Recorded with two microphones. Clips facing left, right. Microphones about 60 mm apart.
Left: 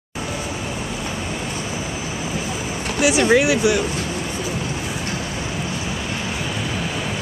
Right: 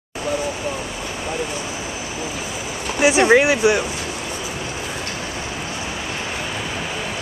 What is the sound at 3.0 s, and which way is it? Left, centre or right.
Speech, right.